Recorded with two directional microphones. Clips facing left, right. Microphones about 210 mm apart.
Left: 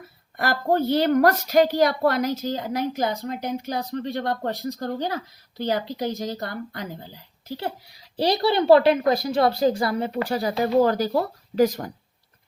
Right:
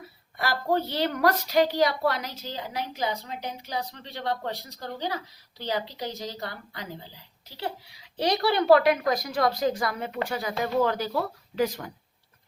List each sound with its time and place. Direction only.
0.3 s a woman's voice: 50° left (ahead or behind)